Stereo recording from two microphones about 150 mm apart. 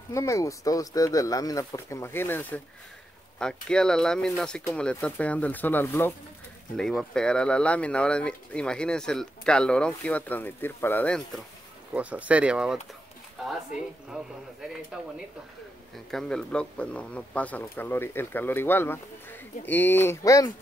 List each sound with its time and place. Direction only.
0.1 s speech: 20° left (ahead or behind)
6.8 s speech: 5° left (ahead or behind)
11.9 s speech: 10° right (ahead or behind)
14.9 s speech: 5° right (ahead or behind); by 20.5 s 20° left (ahead or behind)